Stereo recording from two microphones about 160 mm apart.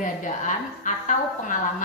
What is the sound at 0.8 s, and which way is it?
Speech, 50° left (ahead or behind).